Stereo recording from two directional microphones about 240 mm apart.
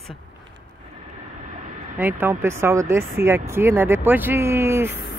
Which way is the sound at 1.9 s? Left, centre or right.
Centre.